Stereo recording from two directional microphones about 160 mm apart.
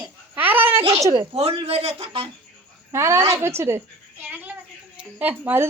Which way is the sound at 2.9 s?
15° right (ahead or behind).